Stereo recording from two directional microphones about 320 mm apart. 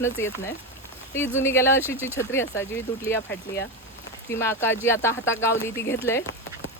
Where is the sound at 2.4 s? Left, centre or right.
Left.